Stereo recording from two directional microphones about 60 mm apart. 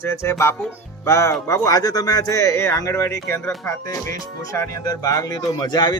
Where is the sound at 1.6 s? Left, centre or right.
Left.